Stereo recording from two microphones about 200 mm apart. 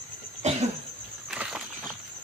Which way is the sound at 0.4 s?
35° right (ahead or behind).